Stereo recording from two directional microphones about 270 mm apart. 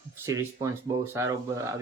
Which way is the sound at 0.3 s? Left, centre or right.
Centre.